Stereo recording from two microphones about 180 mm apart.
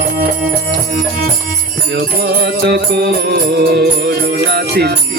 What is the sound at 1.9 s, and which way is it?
Music, 60° right (ahead or behind).